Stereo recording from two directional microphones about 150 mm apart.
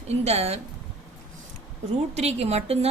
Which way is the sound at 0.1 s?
45° right (ahead or behind).